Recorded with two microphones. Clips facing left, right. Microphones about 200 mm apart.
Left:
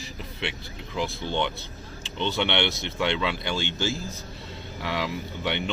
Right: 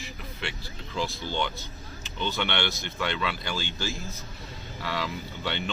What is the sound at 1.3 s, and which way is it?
A man's voice, 25° left (ahead or behind).